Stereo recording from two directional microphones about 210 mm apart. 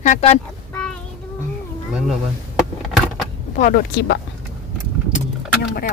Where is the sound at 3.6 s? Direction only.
45° left (ahead or behind).